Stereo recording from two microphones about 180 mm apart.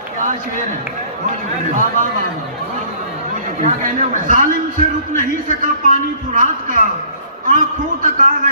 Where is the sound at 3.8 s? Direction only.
45° right (ahead or behind).